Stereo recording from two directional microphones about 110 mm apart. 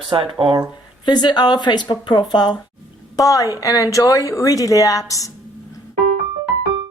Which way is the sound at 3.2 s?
30° left (ahead or behind).